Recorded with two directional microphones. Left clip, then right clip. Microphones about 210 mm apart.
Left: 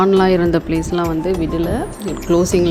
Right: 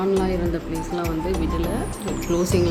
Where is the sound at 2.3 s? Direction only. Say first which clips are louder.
Left 7 dB; 25° left (ahead or behind).